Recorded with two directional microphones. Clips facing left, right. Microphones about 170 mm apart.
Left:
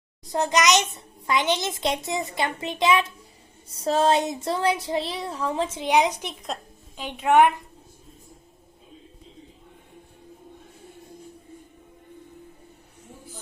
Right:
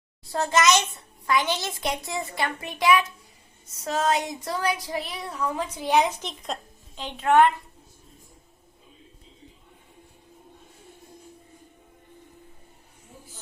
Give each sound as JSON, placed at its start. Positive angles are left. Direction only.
{"t": 0.3, "sound": "a child's voice", "side_deg": 20}
{"t": 6.3, "sound": "a woman's voice", "side_deg": 0}